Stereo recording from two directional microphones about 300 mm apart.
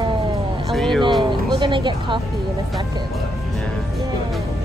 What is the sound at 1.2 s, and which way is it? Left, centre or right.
Music, centre.